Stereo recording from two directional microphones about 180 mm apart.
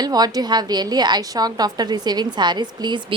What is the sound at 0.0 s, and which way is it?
A woman's voice, 20° right (ahead or behind).